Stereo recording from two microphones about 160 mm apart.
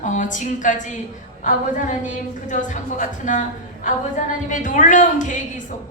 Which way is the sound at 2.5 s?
50° left (ahead or behind).